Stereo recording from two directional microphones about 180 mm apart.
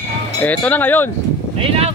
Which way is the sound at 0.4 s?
10° left (ahead or behind).